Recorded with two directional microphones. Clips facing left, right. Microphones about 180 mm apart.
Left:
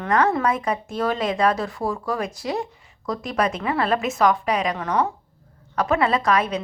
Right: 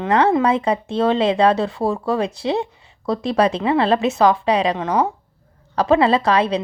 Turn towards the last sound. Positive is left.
turn(degrees=-30)  # may be behind; listen again after turning